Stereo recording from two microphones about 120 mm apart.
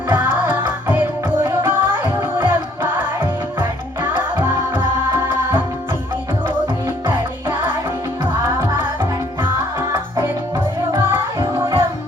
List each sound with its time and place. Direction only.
0.1 s music: 15° right (ahead or behind)
4.2 s music: 15° right (ahead or behind)
7.1 s music: 15° right (ahead or behind)
9.9 s music: 20° right (ahead or behind)